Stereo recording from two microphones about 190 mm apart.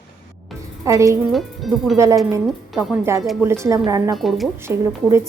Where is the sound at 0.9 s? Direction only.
15° right (ahead or behind).